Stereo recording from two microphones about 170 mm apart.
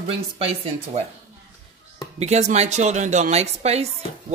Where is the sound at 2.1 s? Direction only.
40° right (ahead or behind).